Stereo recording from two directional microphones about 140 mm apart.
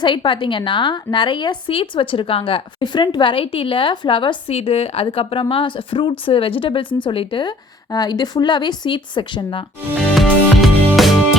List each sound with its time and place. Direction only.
0.0 s a woman's voice: 35° left (ahead or behind)
4.5 s a woman's voice: 45° left (ahead or behind)
7.9 s a woman's voice: 25° left (ahead or behind)
10.2 s music: centre (ahead or behind)